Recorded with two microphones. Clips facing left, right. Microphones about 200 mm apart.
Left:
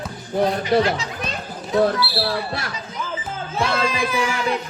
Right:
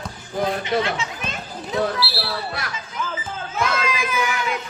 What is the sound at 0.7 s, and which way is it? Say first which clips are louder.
Children playing: left 4 dB; 30° left (ahead or behind).